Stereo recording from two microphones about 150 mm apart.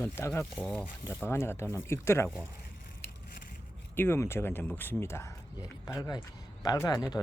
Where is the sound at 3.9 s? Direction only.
15° left (ahead or behind).